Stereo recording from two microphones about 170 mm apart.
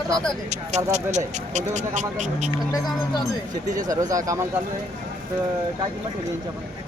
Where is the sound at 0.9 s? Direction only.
40° right (ahead or behind).